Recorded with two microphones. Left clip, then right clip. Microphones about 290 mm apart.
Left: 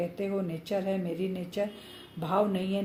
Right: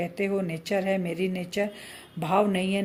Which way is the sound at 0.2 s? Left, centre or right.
Right.